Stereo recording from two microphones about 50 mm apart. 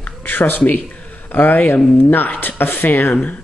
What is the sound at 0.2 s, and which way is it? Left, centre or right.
Speech, left.